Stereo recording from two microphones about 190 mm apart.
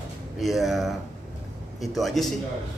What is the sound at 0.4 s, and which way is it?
Speech, centre (ahead or behind).